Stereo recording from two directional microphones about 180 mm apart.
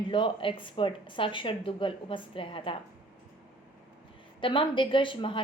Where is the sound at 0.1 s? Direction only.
30° left (ahead or behind).